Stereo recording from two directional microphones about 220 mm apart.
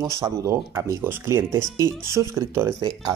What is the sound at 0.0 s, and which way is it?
Speech, 15° right (ahead or behind).